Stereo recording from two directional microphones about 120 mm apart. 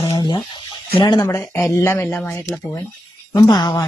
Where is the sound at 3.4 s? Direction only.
35° left (ahead or behind).